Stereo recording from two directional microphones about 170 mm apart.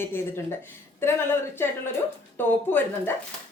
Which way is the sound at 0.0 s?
15° left (ahead or behind).